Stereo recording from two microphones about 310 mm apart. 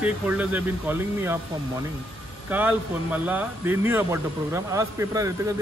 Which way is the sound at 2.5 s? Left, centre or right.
Centre.